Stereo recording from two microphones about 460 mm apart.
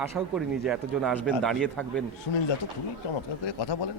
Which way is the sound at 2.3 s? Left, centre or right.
Left.